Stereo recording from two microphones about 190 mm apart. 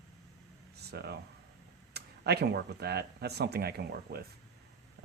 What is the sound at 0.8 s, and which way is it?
Speech, 60° right (ahead or behind).